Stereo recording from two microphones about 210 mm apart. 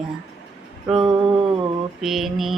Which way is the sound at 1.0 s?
25° right (ahead or behind).